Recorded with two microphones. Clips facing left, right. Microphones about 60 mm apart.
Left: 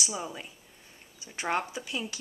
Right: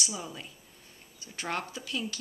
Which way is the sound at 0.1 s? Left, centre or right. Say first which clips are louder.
Left 3 dB; centre.